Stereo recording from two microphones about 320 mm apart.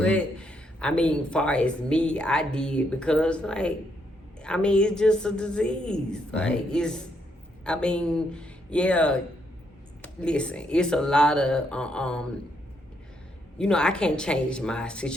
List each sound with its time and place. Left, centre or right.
0.0 s speech: centre
13.6 s speech: centre